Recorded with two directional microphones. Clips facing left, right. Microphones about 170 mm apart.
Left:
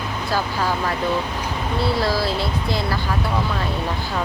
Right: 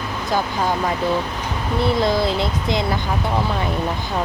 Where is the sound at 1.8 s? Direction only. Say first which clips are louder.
Right 3 dB; 20° right (ahead or behind).